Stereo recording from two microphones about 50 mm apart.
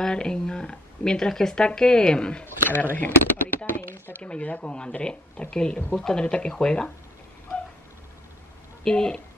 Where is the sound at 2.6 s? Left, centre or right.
Left.